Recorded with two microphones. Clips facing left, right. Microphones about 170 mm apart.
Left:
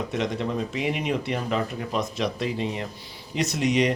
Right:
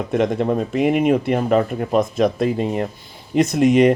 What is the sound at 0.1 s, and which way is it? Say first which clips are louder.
Speech: right 13 dB; 50° right (ahead or behind).